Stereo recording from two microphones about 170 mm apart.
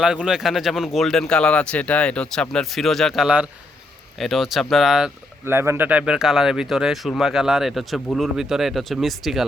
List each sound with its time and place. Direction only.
0.0 s a man's voice: 5° right (ahead or behind)
5.5 s a man's voice: 15° right (ahead or behind)